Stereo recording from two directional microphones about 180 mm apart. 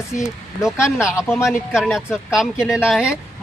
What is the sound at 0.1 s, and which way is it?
Speech, 50° left (ahead or behind).